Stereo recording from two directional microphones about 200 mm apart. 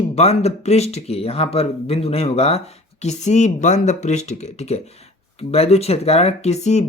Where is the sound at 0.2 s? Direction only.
30° left (ahead or behind).